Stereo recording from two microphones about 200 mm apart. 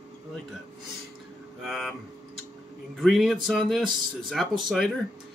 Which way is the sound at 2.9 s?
Centre (ahead or behind).